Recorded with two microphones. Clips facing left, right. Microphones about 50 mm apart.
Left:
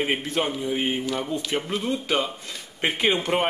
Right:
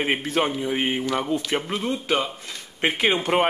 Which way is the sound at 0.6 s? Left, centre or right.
Right.